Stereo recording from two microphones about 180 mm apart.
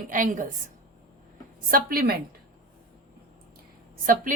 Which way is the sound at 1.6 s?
55° right (ahead or behind).